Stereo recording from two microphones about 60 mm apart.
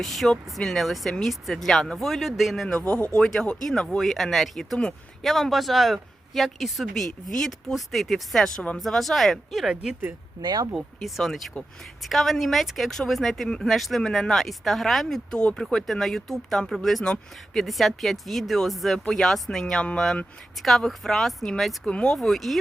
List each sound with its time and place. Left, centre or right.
0.0 s speech: centre
2.8 s speech: left
3.2 s speech: centre
15.3 s speech: centre
20.6 s speech: centre